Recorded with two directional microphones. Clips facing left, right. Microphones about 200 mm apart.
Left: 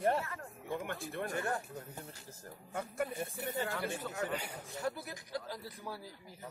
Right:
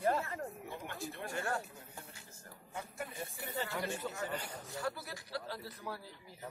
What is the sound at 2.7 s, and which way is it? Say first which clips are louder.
Speech: left 7 dB; 55° left (ahead or behind).